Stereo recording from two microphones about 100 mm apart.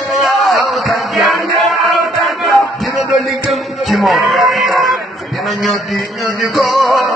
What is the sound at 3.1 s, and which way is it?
Music, centre (ahead or behind).